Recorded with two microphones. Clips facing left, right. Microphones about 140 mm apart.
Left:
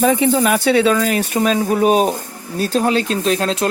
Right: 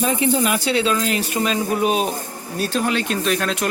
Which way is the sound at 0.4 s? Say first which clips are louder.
Left 6 dB; 50° left (ahead or behind).